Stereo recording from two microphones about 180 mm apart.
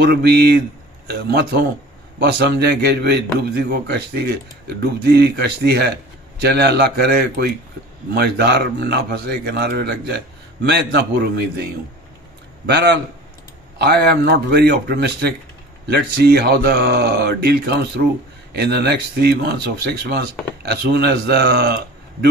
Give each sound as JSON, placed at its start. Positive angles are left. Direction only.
{"t": 0.0, "sound": "a man's voice", "side_deg": -65}
{"t": 12.6, "sound": "a man's voice", "side_deg": -70}
{"t": 13.7, "sound": "a man's voice", "side_deg": -60}